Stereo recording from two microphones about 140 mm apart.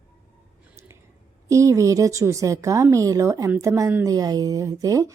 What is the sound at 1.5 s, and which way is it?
Speech, 20° right (ahead or behind).